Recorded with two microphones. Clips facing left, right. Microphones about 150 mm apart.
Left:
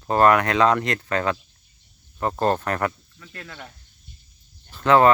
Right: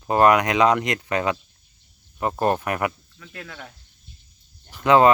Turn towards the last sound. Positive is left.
turn(degrees=-15)  # may be behind; listen again after turning